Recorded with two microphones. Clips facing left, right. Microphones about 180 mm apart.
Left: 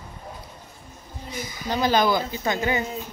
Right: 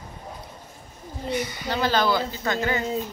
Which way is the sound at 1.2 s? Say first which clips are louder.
Right 8 dB; 70° right (ahead or behind).